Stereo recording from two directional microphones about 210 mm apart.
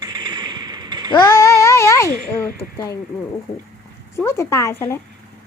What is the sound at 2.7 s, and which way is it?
Speech, 15° left (ahead or behind).